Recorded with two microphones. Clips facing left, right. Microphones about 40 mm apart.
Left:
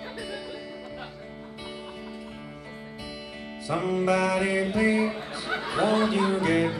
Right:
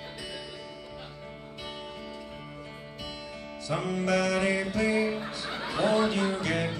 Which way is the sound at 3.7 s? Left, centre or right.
Centre.